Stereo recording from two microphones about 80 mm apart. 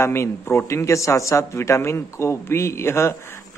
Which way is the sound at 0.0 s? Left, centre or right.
Left.